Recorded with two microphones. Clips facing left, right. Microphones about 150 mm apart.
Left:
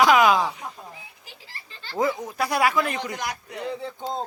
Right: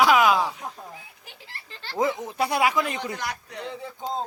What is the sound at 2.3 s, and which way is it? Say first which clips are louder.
Speech: even; 25° right (ahead or behind).